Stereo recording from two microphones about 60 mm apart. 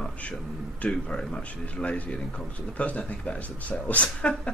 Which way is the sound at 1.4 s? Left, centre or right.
Left.